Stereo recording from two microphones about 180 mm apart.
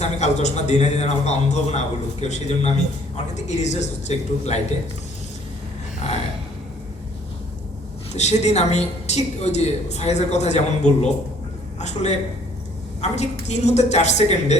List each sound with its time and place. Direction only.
0.0 s a woman's voice: 40° left (ahead or behind)
8.1 s a woman's voice: 40° left (ahead or behind)